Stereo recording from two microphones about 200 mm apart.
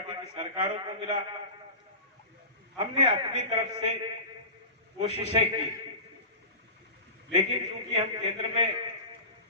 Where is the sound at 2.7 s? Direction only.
25° right (ahead or behind).